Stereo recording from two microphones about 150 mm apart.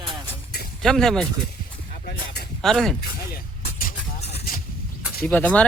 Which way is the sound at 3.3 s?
70° left (ahead or behind).